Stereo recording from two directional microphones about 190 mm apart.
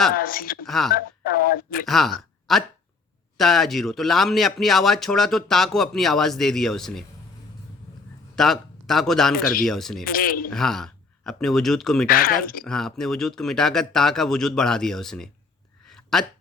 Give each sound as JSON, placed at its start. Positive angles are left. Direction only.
{"t": 0.1, "sound": "speech", "side_deg": 50}
{"t": 0.6, "sound": "speech", "side_deg": 0}
{"t": 0.9, "sound": "speech", "side_deg": 50}
{"t": 1.9, "sound": "speech", "side_deg": 0}
{"t": 8.4, "sound": "a man's voice", "side_deg": 0}
{"t": 9.3, "sound": "speech", "side_deg": 50}
{"t": 9.6, "sound": "speech", "side_deg": 0}
{"t": 10.0, "sound": "speech", "side_deg": 50}
{"t": 10.5, "sound": "speech", "side_deg": 0}
{"t": 12.0, "sound": "speech", "side_deg": 50}
{"t": 12.6, "sound": "speech", "side_deg": 0}
{"t": 15.9, "sound": "a sound", "side_deg": 0}